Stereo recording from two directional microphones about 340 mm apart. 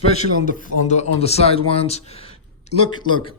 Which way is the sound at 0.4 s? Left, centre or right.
Centre.